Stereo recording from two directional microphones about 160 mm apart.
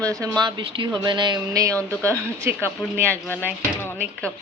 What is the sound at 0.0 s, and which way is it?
Speech, 20° right (ahead or behind).